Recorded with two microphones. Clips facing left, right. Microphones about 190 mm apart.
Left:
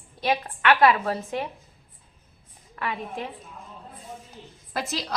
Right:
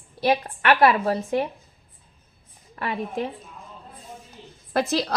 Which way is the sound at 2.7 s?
30° right (ahead or behind).